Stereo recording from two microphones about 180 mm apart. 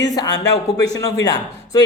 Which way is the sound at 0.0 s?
20° left (ahead or behind).